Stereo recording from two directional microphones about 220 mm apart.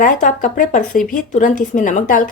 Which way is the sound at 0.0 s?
35° left (ahead or behind).